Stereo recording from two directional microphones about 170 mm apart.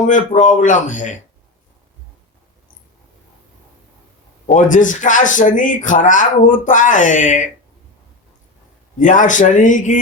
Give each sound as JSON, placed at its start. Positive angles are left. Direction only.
{"t": 0.3, "sound": "speech", "side_deg": 50}
{"t": 4.4, "sound": "speech", "side_deg": 50}
{"t": 9.0, "sound": "speech", "side_deg": 50}